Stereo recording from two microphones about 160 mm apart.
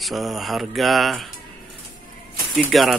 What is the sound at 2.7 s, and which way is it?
Speech, centre (ahead or behind).